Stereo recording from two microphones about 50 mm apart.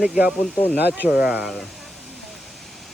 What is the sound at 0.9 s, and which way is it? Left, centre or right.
Speech, right.